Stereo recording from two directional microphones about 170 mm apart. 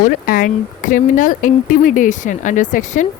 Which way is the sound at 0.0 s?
55° left (ahead or behind).